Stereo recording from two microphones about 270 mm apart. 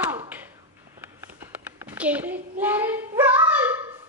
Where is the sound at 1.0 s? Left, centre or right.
Centre.